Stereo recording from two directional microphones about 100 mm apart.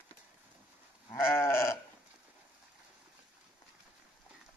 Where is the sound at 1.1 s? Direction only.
25° left (ahead or behind).